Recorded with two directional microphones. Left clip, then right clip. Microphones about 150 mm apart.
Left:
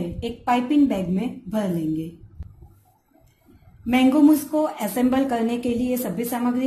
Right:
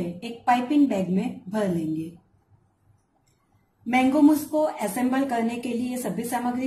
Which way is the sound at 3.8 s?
30° left (ahead or behind).